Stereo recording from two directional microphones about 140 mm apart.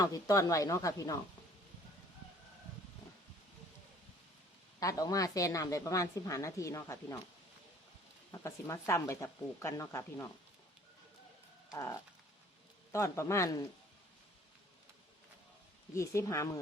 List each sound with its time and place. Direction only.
0.0 s a woman's voice: 25° left (ahead or behind)
4.8 s a woman's voice: 25° left (ahead or behind)
8.3 s a woman's voice: 20° left (ahead or behind)
11.7 s a woman's voice: 25° left (ahead or behind)
16.0 s a woman's voice: 20° left (ahead or behind)